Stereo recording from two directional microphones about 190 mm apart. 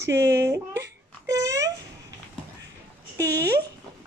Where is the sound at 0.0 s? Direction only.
15° right (ahead or behind).